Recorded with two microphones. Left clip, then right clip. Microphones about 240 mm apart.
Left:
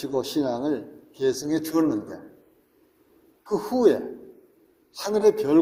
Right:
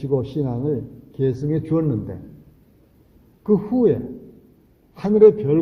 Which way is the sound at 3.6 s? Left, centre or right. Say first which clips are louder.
Left 3 dB; left.